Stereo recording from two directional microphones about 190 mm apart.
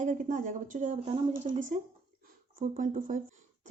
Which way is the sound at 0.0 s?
40° right (ahead or behind).